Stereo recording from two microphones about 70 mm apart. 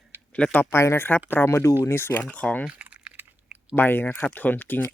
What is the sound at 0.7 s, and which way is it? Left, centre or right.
Speech, left.